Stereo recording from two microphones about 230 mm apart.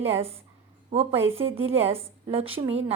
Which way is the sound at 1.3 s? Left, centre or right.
Right.